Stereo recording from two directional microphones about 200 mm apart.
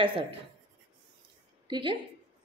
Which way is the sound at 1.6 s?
25° right (ahead or behind).